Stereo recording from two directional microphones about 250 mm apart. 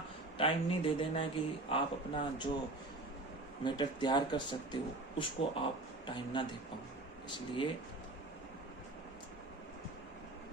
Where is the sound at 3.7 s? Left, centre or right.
Centre.